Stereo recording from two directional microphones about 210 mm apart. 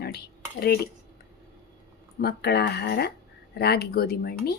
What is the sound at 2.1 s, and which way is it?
Speech, 50° left (ahead or behind).